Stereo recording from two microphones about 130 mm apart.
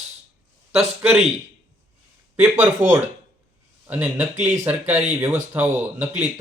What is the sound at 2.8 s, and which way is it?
Speech, 65° right (ahead or behind).